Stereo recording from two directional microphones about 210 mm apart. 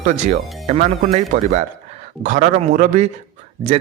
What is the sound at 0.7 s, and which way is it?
A man's voice, 30° right (ahead or behind).